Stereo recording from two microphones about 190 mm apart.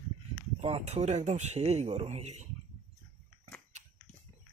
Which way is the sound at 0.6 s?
35° right (ahead or behind).